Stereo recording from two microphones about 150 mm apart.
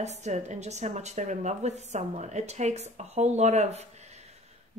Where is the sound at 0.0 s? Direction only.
50° right (ahead or behind).